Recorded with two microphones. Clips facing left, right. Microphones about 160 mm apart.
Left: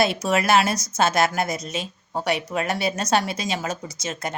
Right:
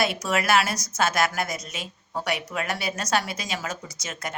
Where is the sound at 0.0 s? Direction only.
25° left (ahead or behind).